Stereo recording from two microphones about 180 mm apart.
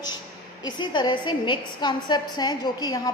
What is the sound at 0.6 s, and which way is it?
A woman's voice, 25° left (ahead or behind).